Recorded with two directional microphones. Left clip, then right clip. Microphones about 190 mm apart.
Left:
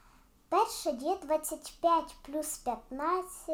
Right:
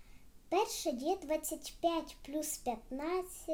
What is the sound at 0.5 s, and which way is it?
A woman's voice, 15° right (ahead or behind).